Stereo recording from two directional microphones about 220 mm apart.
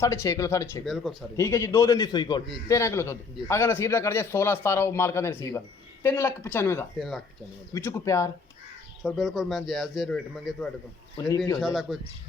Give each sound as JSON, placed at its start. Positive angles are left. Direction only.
{"t": 0.0, "sound": "a man's voice", "side_deg": 15}
{"t": 0.9, "sound": "a man's voice", "side_deg": 0}
{"t": 1.4, "sound": "a man's voice", "side_deg": 15}
{"t": 9.0, "sound": "a man's voice", "side_deg": 0}
{"t": 11.2, "sound": "a man's voice", "side_deg": 15}
{"t": 11.6, "sound": "a man's voice", "side_deg": 0}